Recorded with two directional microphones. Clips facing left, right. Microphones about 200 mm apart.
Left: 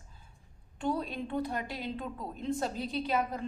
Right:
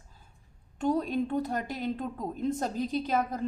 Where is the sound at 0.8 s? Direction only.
45° right (ahead or behind).